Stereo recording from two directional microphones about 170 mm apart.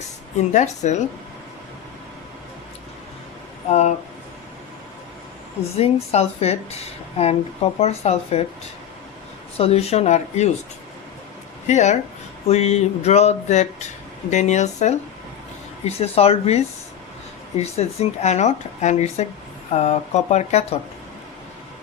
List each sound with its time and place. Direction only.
0.5 s speech: 45° left (ahead or behind)
3.7 s speech: 40° left (ahead or behind)
5.7 s a woman's voice: 35° left (ahead or behind)
9.6 s a woman's voice: 35° left (ahead or behind)
11.7 s a woman's voice: 45° left (ahead or behind)